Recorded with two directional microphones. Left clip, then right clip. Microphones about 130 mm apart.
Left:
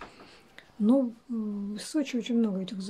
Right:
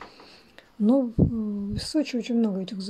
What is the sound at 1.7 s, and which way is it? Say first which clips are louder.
A woman's voice: right 4 dB; 35° right (ahead or behind).